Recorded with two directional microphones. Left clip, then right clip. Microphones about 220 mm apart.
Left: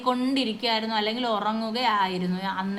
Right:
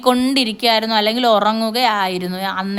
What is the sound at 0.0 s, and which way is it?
A woman's voice, 50° right (ahead or behind).